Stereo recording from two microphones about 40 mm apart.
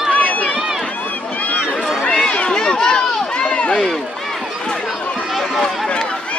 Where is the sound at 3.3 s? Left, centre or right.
Left.